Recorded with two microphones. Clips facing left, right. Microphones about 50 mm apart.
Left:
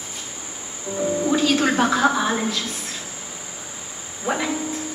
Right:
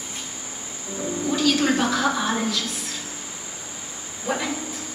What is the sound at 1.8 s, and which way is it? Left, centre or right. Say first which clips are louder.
Speech: left 4 dB; left.